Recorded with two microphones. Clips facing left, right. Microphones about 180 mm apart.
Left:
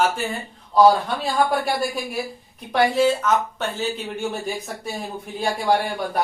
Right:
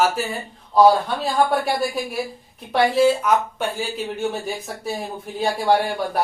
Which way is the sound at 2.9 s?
10° right (ahead or behind).